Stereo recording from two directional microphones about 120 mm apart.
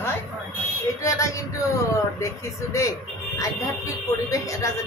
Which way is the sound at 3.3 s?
25° left (ahead or behind).